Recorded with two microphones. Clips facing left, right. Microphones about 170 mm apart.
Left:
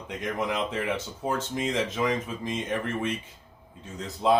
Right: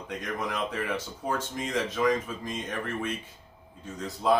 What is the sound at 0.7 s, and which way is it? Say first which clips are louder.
Speech: left 2 dB; 20° left (ahead or behind).